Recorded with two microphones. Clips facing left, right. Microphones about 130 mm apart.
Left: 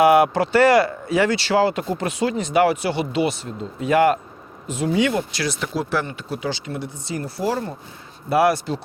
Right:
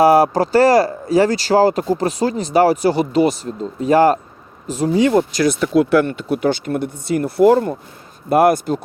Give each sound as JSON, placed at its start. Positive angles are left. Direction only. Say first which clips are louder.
{"t": 0.0, "sound": "speech", "louder": "right 3 dB", "side_deg": -35}